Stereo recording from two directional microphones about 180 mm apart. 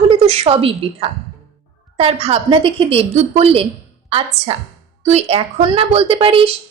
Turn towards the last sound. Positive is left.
turn(degrees=-30)  # may be behind; listen again after turning